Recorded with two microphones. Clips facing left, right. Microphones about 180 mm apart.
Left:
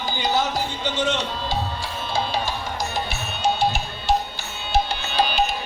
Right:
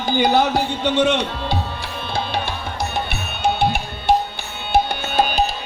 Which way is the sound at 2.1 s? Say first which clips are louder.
Right 1 dB; 60° right (ahead or behind).